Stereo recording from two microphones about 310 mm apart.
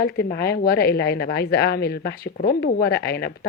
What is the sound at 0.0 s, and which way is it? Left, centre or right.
A woman's voice, left.